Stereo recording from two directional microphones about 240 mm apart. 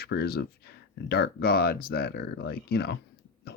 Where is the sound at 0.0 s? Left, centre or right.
Left.